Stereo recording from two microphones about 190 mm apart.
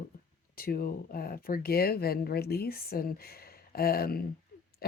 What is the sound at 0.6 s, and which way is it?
A woman's voice, 50° left (ahead or behind).